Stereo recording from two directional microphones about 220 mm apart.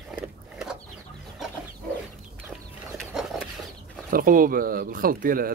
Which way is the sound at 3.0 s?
Centre (ahead or behind).